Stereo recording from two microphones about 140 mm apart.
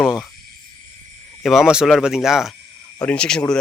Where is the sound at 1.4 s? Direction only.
Centre (ahead or behind).